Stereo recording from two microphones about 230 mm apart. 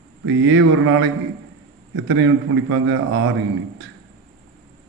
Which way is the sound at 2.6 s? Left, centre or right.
Right.